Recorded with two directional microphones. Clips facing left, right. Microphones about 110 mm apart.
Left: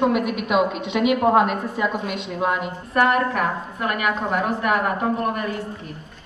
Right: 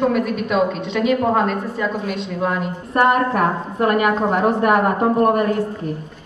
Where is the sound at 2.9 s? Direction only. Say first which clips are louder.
Right 3 dB; 40° right (ahead or behind).